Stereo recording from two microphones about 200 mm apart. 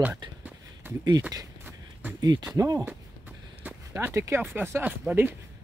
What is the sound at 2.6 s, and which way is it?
Speech, 20° right (ahead or behind).